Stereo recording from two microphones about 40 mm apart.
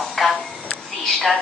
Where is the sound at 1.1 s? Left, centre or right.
Centre.